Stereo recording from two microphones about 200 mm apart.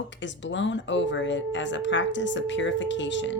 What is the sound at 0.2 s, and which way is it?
Speech, 65° left (ahead or behind).